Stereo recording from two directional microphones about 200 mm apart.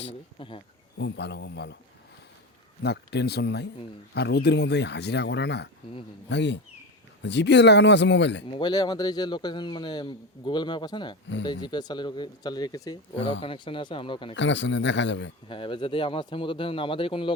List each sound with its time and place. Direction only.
0.1 s speech: 25° left (ahead or behind)
0.9 s speech: 65° left (ahead or behind)
2.8 s speech: 55° left (ahead or behind)
5.8 s speech: 25° left (ahead or behind)
6.2 s speech: 60° left (ahead or behind)
8.4 s speech: 25° left (ahead or behind)
14.3 s speech: 65° left (ahead or behind)
15.4 s speech: 25° left (ahead or behind)